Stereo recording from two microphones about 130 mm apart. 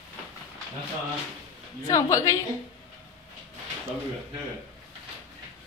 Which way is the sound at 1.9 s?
25° left (ahead or behind).